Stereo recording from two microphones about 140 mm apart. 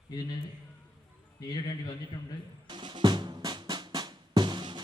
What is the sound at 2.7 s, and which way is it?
Drum, 35° right (ahead or behind).